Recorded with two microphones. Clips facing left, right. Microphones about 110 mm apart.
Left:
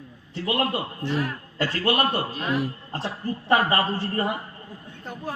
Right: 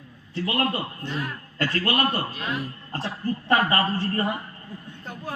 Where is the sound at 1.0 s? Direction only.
90° left.